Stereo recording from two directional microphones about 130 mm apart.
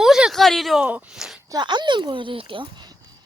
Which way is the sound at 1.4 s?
35° right (ahead or behind).